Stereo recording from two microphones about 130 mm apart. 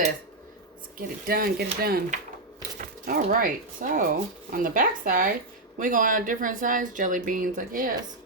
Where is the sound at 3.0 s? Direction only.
90° right.